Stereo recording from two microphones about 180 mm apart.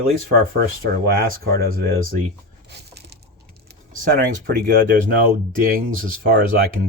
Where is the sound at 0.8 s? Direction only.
55° right (ahead or behind).